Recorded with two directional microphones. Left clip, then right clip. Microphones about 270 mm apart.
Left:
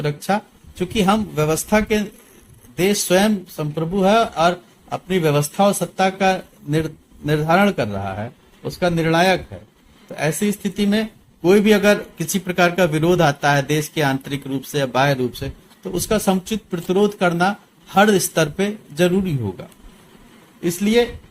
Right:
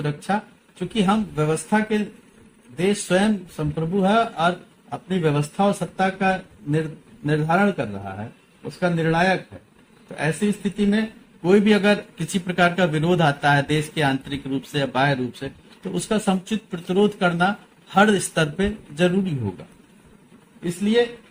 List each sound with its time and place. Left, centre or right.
0.0 s speech: left